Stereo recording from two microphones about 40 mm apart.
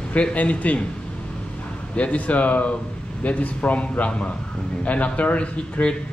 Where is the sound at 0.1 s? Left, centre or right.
Left.